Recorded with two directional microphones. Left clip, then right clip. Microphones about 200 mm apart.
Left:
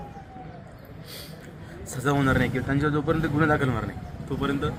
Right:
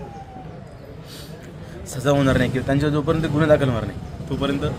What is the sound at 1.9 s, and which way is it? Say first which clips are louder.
A man's voice: right 5 dB; 5° right (ahead or behind).